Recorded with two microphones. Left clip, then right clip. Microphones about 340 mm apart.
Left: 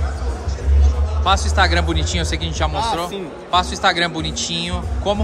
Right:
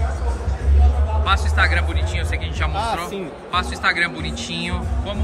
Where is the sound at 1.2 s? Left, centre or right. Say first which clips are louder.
Left 3 dB; centre.